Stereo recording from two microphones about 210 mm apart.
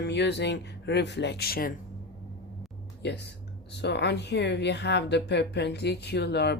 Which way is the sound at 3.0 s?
55° left (ahead or behind).